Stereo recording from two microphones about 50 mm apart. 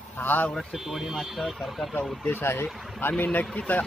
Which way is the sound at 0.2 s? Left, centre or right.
Left.